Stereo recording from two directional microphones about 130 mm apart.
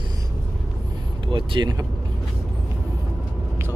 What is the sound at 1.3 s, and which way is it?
Vehicle, 40° right (ahead or behind).